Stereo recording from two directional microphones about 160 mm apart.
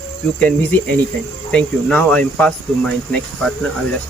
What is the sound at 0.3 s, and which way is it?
Speech, 10° left (ahead or behind).